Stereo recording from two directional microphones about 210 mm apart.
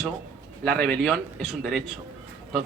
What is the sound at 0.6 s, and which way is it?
Speech, 5° left (ahead or behind).